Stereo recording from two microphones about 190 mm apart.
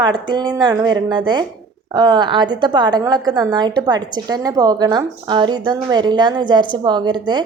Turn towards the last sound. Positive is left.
turn(degrees=-25)  # may be behind; listen again after turning